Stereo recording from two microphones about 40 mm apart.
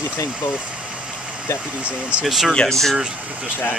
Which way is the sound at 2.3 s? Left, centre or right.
Centre.